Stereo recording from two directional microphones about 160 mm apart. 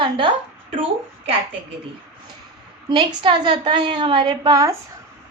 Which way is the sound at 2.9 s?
30° right (ahead or behind).